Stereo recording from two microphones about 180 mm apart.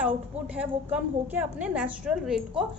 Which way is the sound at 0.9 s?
10° right (ahead or behind).